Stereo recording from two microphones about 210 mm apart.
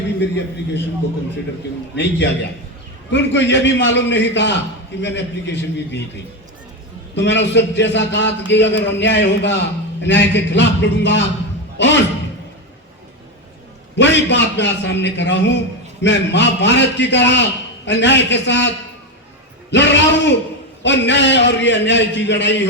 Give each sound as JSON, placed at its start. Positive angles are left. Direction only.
{"t": 0.2, "sound": "a man's voice", "side_deg": 55}
{"t": 2.0, "sound": "a man's voice", "side_deg": 55}
{"t": 7.2, "sound": "a man's voice", "side_deg": 55}
{"t": 13.9, "sound": "a man's voice", "side_deg": 55}
{"t": 19.7, "sound": "a man's voice", "side_deg": 55}